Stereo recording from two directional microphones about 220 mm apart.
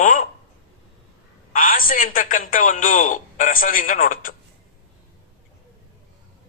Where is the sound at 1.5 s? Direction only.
40° left (ahead or behind).